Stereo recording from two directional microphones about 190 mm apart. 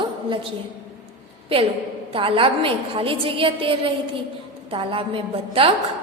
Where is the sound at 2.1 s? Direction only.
30° right (ahead or behind).